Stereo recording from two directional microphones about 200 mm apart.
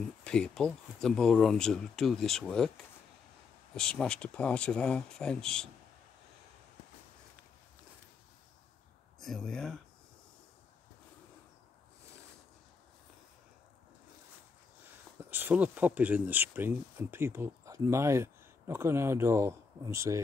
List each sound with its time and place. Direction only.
0.2 s speech: 5° left (ahead or behind)
3.7 s speech: 5° left (ahead or behind)
9.2 s speech: centre (ahead or behind)
15.2 s speech: 10° right (ahead or behind)